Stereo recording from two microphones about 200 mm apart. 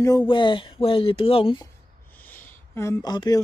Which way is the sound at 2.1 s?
10° left (ahead or behind).